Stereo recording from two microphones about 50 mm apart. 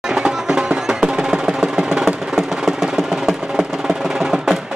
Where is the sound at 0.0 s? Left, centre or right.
Centre.